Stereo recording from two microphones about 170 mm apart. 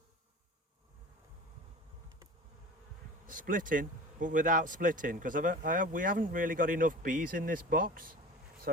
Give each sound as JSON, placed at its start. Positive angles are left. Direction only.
{"t": 3.2, "sound": "speech", "side_deg": -50}